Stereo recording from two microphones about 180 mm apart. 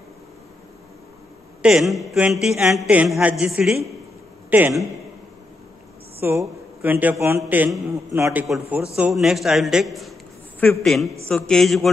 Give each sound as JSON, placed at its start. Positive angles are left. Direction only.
{"t": 1.6, "sound": "a man's voice", "side_deg": 0}
{"t": 6.2, "sound": "a man's voice", "side_deg": -10}